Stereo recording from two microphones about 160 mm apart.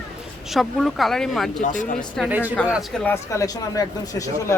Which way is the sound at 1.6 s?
55° left (ahead or behind).